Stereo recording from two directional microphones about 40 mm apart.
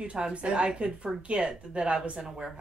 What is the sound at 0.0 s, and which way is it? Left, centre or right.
Speech, right.